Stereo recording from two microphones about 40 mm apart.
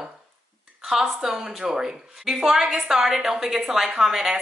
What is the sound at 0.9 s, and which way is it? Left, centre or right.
Speech, centre.